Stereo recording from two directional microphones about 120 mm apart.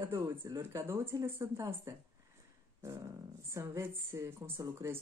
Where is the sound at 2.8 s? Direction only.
25° right (ahead or behind).